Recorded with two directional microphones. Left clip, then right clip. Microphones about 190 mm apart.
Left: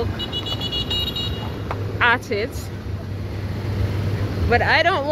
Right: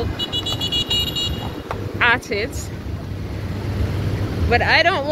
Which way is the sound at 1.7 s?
15° left (ahead or behind).